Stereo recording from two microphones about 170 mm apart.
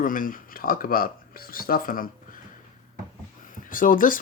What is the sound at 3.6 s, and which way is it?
Speech, 55° left (ahead or behind).